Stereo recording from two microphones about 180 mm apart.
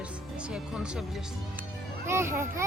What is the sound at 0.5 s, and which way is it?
Speech, 5° right (ahead or behind).